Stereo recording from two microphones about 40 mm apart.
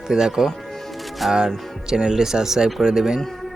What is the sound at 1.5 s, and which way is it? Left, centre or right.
Speech, centre.